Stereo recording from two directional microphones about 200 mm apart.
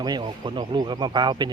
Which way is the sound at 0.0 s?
20° right (ahead or behind).